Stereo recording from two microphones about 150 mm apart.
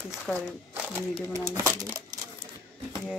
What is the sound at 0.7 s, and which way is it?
Speech, 15° right (ahead or behind).